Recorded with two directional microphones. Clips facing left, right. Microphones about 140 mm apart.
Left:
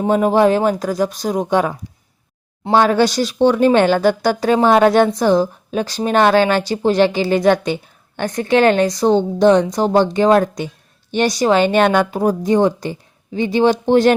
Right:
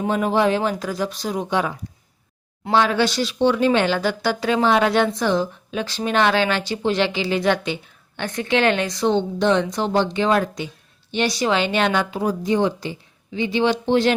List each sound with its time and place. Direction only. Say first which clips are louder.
0.1 s speech: left 6 dB; 45° left (ahead or behind)
2.7 s speech: left 5 dB; 45° left (ahead or behind)